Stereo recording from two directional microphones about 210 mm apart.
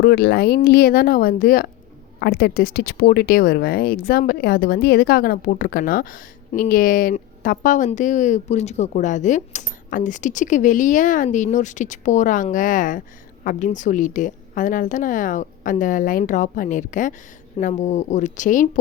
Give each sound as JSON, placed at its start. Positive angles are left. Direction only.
{"t": 0.0, "sound": "speech", "side_deg": 50}